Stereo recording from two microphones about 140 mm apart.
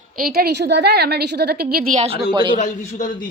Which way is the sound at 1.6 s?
90° right.